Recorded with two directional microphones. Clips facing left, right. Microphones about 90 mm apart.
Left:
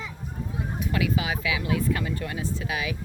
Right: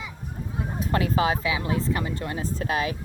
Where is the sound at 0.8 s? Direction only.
40° right (ahead or behind).